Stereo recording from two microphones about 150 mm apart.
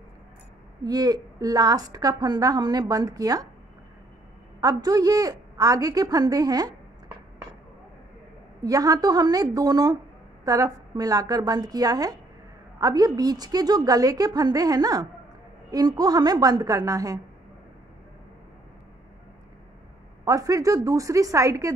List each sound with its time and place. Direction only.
0.8 s a woman's voice: 25° right (ahead or behind)
4.6 s a woman's voice: 25° right (ahead or behind)
8.6 s a woman's voice: 25° right (ahead or behind)
20.2 s a woman's voice: 25° right (ahead or behind)